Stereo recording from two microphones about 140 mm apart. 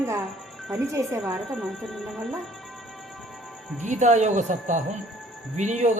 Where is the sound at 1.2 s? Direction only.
Centre (ahead or behind).